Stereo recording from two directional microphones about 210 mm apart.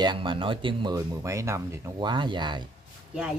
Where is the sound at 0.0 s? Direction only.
20° right (ahead or behind).